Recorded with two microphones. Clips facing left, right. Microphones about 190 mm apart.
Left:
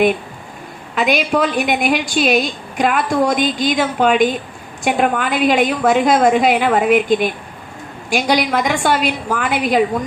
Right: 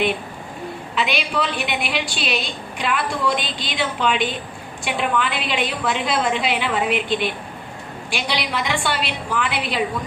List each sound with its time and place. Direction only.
0.9 s a woman's voice: 45° left (ahead or behind)